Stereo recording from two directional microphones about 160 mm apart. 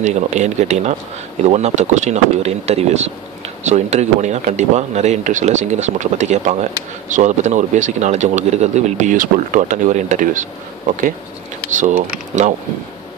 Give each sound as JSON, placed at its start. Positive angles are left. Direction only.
{"t": 0.0, "sound": "speech", "side_deg": -45}
{"t": 11.7, "sound": "speech", "side_deg": -50}